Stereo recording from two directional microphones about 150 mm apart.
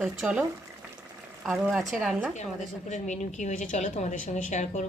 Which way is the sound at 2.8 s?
50° left (ahead or behind).